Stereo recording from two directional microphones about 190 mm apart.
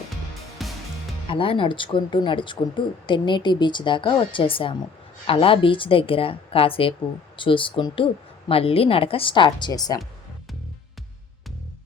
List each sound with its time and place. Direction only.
0.6 s music: centre (ahead or behind)
1.3 s speech: 25° left (ahead or behind)